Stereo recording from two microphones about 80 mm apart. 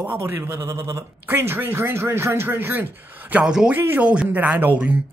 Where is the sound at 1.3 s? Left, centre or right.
Right.